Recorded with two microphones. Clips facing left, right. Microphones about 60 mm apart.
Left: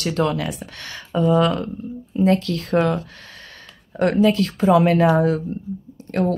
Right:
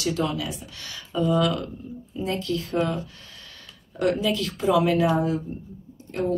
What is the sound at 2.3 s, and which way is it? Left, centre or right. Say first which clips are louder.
Speech: left 6 dB; left.